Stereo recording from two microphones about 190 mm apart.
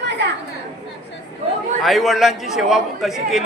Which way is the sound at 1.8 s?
Centre (ahead or behind).